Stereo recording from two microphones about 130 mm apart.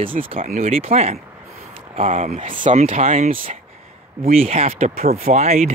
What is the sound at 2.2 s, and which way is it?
Speech, 75° right (ahead or behind).